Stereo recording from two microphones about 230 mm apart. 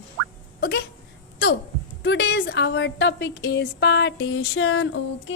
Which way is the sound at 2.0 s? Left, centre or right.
Left.